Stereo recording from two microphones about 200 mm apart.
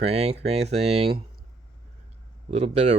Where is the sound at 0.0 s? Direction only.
30° right (ahead or behind).